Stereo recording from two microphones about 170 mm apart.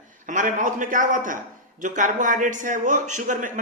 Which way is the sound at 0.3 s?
50° right (ahead or behind).